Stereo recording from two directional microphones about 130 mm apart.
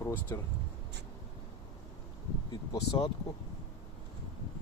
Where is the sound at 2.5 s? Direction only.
35° left (ahead or behind).